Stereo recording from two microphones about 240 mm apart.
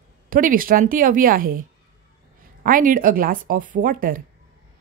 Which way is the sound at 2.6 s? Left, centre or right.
Right.